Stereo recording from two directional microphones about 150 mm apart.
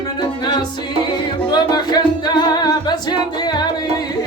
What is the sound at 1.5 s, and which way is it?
Music, 30° left (ahead or behind).